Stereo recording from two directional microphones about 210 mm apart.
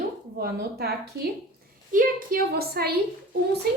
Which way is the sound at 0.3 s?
50° right (ahead or behind).